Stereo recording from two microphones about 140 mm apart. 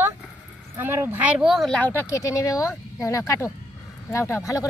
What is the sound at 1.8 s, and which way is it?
Speech, 15° left (ahead or behind).